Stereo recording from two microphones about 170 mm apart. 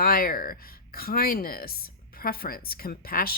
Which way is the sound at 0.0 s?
60° left (ahead or behind).